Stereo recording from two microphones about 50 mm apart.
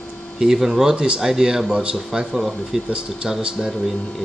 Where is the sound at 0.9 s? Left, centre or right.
Centre.